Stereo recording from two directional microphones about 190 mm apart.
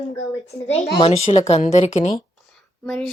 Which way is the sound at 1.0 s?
35° left (ahead or behind).